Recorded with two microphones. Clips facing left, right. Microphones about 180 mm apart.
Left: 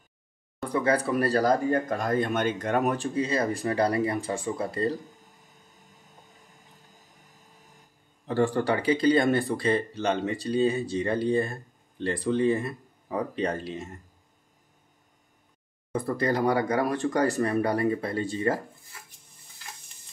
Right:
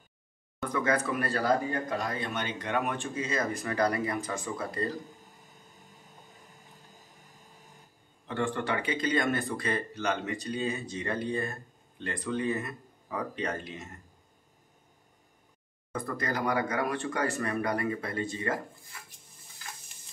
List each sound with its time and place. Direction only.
0.7 s speech: 35° left (ahead or behind)
8.3 s speech: 35° left (ahead or behind)
15.9 s speech: 30° left (ahead or behind)